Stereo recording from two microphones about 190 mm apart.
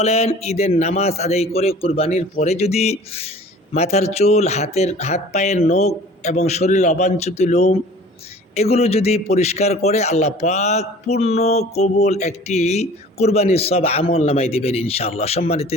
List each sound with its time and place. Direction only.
0.0 s a man's voice: 35° left (ahead or behind)